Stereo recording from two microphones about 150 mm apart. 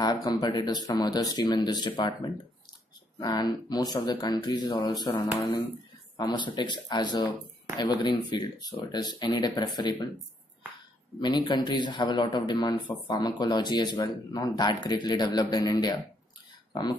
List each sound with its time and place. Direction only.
0.0 s a man's voice: 25° left (ahead or behind)
11.1 s a man's voice: 30° left (ahead or behind)